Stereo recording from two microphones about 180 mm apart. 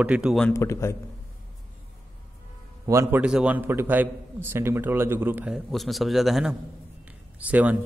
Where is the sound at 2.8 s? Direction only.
15° right (ahead or behind).